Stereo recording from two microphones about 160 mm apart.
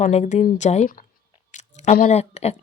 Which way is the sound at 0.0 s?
45° left (ahead or behind).